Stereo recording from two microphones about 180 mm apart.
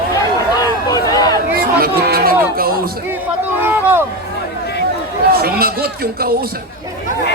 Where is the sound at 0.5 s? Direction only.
20° left (ahead or behind).